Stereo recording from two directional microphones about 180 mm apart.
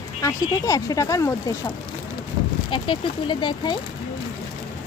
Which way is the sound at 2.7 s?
25° left (ahead or behind).